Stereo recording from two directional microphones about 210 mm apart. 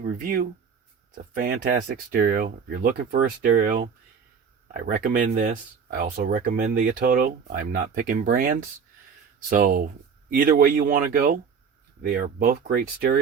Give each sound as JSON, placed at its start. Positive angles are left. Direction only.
{"t": 0.0, "sound": "speech", "side_deg": -45}
{"t": 4.9, "sound": "speech", "side_deg": -45}